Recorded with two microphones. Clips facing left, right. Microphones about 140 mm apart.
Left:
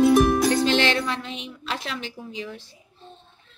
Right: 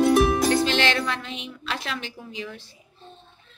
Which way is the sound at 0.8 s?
35° left (ahead or behind).